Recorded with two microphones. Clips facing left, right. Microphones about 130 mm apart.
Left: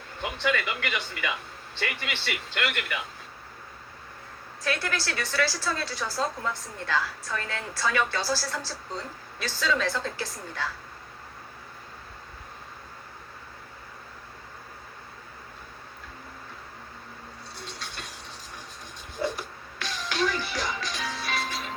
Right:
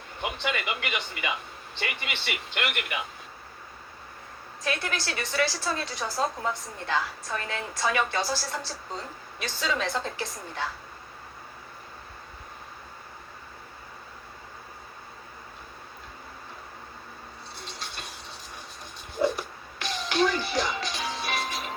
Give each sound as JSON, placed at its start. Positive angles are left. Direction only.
{"t": 0.2, "sound": "a woman's voice", "side_deg": -20}
{"t": 4.6, "sound": "a woman's voice", "side_deg": -20}
{"t": 19.8, "sound": "music", "side_deg": -20}